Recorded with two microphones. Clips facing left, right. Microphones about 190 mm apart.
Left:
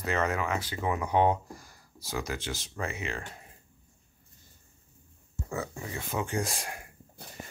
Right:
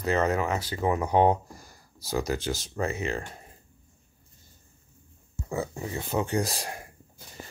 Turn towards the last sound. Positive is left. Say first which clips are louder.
# right 4 dB
turn(degrees=-35)  # may be behind; listen again after turning